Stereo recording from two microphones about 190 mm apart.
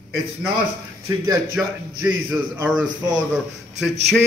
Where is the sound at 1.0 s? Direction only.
10° right (ahead or behind).